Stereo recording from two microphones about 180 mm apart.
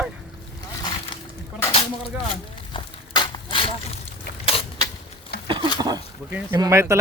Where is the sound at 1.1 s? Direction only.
30° left (ahead or behind).